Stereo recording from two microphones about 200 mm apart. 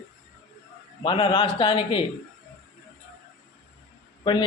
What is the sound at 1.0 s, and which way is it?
A man's voice, 25° left (ahead or behind).